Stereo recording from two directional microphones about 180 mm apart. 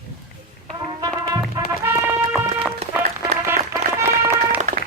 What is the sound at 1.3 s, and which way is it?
Music, 15° right (ahead or behind).